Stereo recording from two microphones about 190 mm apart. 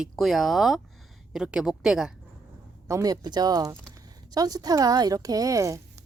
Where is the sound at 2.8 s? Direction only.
15° right (ahead or behind).